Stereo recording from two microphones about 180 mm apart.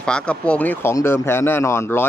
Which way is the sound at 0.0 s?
5° left (ahead or behind).